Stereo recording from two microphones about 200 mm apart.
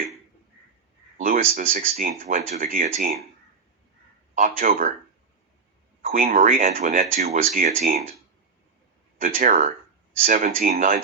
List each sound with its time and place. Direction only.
1.2 s speech: 40° right (ahead or behind)
4.4 s speech: 45° right (ahead or behind)
6.0 s speech: 45° right (ahead or behind)
9.2 s speech: 40° right (ahead or behind)